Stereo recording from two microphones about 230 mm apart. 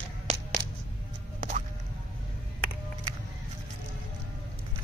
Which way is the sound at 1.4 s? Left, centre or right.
Right.